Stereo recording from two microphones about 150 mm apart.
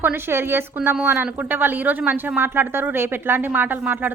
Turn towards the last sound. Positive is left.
turn(degrees=-10)  # may be behind; listen again after turning